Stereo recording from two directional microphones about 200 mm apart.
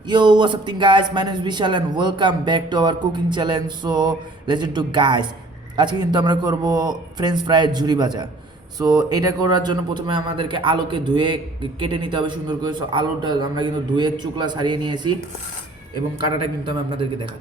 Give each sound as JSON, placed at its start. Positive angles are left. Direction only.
{"t": 0.1, "sound": "a man's voice", "side_deg": -25}
{"t": 16.4, "sound": "a man's voice", "side_deg": -25}